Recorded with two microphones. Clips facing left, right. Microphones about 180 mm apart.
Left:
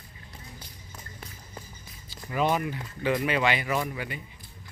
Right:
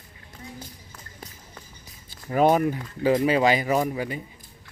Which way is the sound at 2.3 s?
45° right (ahead or behind).